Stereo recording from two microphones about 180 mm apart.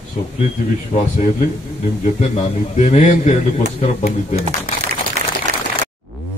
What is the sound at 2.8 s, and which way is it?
A man's voice, 40° left (ahead or behind).